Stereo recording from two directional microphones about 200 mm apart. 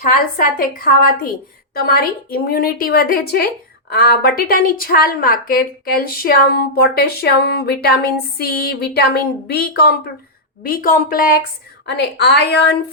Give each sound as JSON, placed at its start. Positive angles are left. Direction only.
{"t": 0.0, "sound": "a woman's voice", "side_deg": 45}
{"t": 11.9, "sound": "a woman's voice", "side_deg": 60}